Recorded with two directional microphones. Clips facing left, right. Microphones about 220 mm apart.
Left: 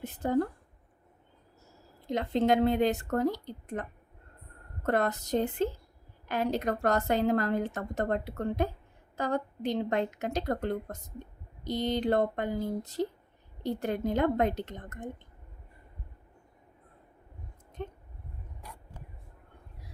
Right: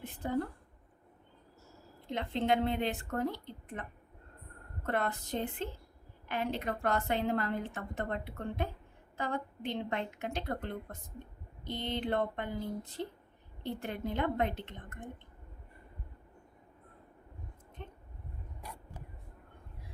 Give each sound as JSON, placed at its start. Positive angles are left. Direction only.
{"t": 0.0, "sound": "a woman's voice", "side_deg": 40}
{"t": 2.0, "sound": "a woman's voice", "side_deg": 40}
{"t": 17.8, "sound": "a sound", "side_deg": 40}